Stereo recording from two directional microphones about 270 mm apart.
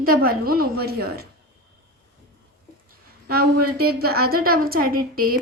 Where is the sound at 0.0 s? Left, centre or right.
Right.